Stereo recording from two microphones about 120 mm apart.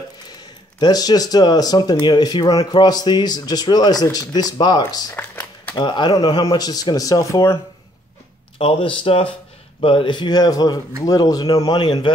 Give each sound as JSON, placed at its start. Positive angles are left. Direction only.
{"t": 0.7, "sound": "speech", "side_deg": 35}
{"t": 5.1, "sound": "a sound", "side_deg": 15}
{"t": 5.8, "sound": "speech", "side_deg": 40}
{"t": 8.5, "sound": "speech", "side_deg": 45}